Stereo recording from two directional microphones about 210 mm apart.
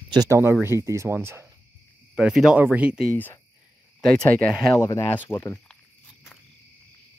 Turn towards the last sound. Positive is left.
turn(degrees=15)  # may be behind; listen again after turning